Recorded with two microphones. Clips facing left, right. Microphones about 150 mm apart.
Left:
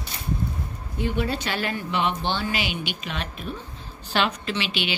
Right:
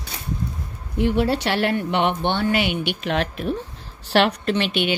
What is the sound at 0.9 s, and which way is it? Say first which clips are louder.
Speech: right 6 dB; 70° right (ahead or behind).